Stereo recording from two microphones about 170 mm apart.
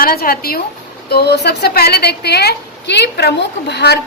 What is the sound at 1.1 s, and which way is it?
A woman's voice, 70° left (ahead or behind).